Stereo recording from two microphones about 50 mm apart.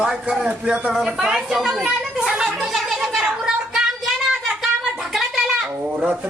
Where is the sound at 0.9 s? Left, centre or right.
Centre.